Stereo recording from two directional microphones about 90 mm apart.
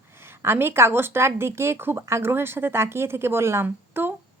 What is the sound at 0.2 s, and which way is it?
A woman's voice, 25° right (ahead or behind).